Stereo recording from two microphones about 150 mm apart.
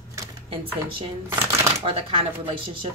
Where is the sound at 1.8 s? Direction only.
35° right (ahead or behind).